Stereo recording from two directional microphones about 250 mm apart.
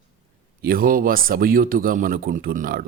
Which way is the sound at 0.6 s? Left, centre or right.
Right.